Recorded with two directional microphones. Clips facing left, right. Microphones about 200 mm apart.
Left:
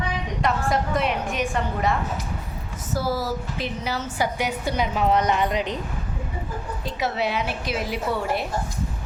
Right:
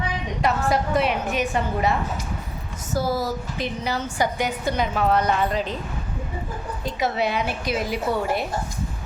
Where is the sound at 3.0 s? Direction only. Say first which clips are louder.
Right 2 dB; 20° right (ahead or behind).